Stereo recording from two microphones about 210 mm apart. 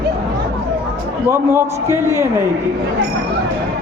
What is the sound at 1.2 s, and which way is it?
Speech, 10° right (ahead or behind).